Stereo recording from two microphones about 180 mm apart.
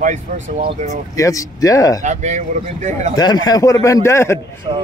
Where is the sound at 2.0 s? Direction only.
40° right (ahead or behind).